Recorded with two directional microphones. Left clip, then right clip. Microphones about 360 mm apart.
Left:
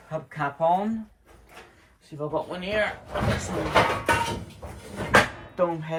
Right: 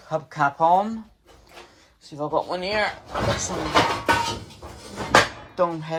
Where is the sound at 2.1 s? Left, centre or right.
Centre.